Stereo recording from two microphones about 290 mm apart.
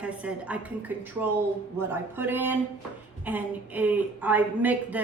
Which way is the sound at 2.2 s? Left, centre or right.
Centre.